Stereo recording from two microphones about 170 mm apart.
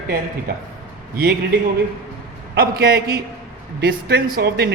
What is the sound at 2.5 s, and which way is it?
Speech, 65° right (ahead or behind).